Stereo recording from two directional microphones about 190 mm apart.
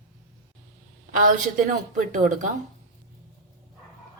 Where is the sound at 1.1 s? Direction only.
45° right (ahead or behind).